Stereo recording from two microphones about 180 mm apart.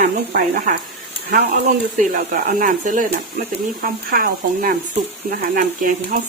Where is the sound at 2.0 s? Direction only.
50° right (ahead or behind).